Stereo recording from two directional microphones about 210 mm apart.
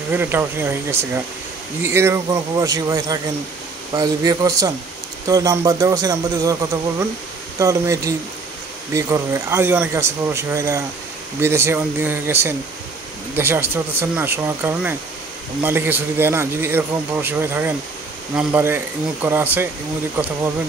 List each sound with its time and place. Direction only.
0.1 s a man's voice: 10° right (ahead or behind)